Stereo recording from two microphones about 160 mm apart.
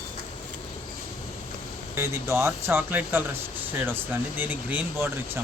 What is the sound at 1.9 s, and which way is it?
Speech, 15° right (ahead or behind).